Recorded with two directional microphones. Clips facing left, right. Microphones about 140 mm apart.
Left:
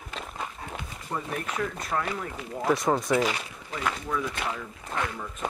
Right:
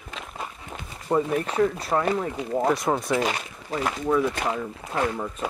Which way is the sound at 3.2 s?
45° right (ahead or behind).